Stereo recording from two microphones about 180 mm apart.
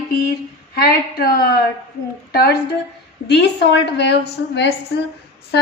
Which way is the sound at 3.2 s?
70° left (ahead or behind).